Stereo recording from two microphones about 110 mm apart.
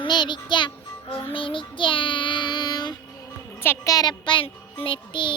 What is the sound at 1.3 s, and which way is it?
Child singing, 50° left (ahead or behind).